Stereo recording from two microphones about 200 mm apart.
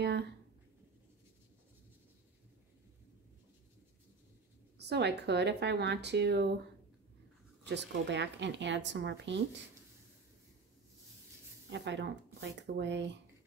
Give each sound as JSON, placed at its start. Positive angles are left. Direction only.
{"t": 4.7, "sound": "a woman's voice", "side_deg": -60}
{"t": 7.6, "sound": "a woman's voice", "side_deg": -60}
{"t": 11.7, "sound": "a woman's voice", "side_deg": -60}